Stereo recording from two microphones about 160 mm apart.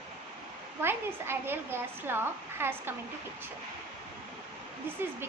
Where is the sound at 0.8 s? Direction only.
15° right (ahead or behind).